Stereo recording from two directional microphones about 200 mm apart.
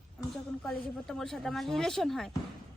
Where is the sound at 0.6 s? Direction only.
Centre (ahead or behind).